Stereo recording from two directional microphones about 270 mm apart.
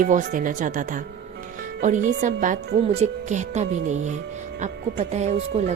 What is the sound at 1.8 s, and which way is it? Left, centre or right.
Speech, right.